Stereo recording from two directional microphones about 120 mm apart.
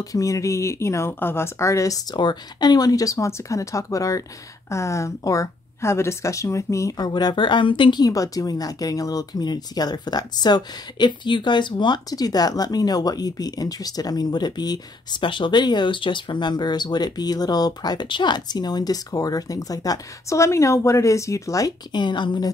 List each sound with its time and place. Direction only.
0.0 s speech: 30° left (ahead or behind)